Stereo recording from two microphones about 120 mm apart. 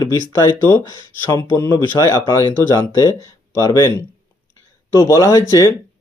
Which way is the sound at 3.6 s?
35° left (ahead or behind).